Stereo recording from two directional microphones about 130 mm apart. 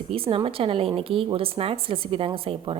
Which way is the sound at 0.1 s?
45° right (ahead or behind).